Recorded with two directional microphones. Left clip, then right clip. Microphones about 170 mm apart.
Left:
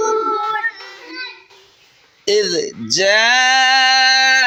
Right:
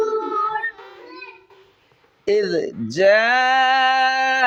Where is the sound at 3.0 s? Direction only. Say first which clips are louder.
Left 2 dB; 40° right (ahead or behind).